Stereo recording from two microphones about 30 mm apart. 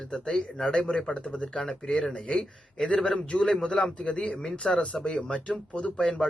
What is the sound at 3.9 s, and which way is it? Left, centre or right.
Speech, left.